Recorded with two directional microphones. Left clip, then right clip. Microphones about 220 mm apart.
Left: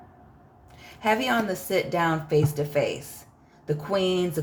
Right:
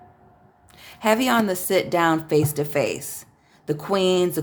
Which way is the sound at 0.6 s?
35° right (ahead or behind).